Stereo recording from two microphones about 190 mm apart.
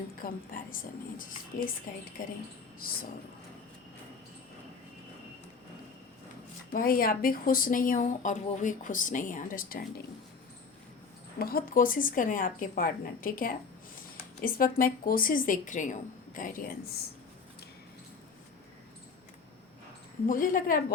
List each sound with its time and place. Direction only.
0.2 s speech: 45° left (ahead or behind)
6.7 s speech: 50° left (ahead or behind)
11.3 s speech: 50° left (ahead or behind)
20.2 s speech: 45° left (ahead or behind)